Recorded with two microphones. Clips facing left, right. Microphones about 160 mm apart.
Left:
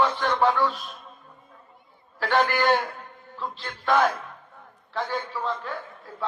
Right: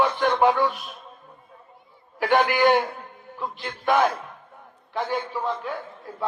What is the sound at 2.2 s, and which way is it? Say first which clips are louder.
A man's voice: right 3 dB; 15° right (ahead or behind).